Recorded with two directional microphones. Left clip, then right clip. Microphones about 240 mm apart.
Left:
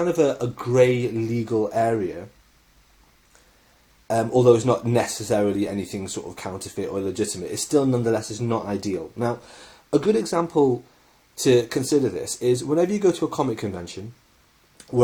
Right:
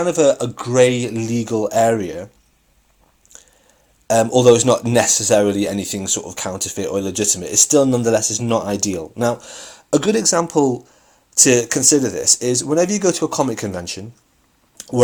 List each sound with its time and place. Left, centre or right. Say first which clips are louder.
0.0 s speech: right 6 dB; centre
4.0 s speech: right 5 dB; right
11.4 s speech: right 3 dB; right
14.8 s a sound: right 4 dB; right